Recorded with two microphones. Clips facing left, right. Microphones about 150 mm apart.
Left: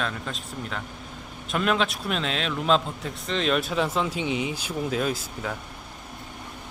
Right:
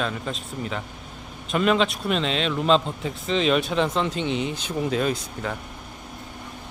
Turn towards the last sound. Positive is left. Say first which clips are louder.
# right 2 dB
turn(degrees=0)  # may be behind; listen again after turning